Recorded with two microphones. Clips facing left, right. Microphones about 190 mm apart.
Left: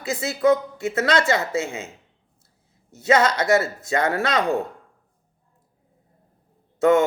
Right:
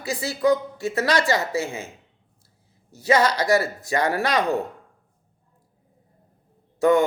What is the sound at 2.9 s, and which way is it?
Speech, 30° right (ahead or behind).